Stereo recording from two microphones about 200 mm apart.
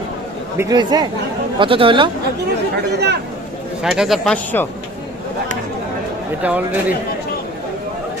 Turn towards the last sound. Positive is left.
turn(degrees=-10)  # may be behind; listen again after turning